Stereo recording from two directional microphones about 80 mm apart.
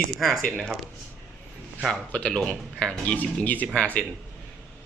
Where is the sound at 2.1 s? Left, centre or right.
Centre.